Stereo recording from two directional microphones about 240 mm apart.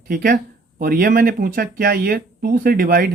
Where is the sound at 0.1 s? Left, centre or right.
Right.